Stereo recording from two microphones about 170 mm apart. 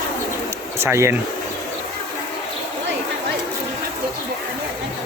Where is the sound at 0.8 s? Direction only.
15° right (ahead or behind).